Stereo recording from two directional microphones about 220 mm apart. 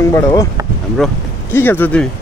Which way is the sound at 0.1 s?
15° left (ahead or behind).